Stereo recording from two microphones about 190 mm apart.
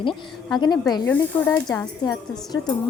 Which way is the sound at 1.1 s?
10° left (ahead or behind).